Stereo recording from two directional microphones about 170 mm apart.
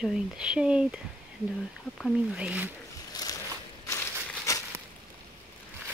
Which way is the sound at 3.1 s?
20° left (ahead or behind).